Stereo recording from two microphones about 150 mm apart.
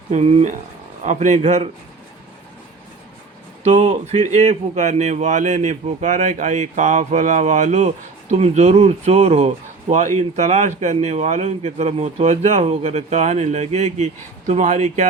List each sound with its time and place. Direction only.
0.1 s speech: 45° right (ahead or behind)
3.6 s speech: 45° right (ahead or behind)